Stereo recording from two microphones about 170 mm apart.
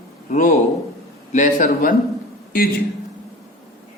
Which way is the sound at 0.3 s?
50° left (ahead or behind).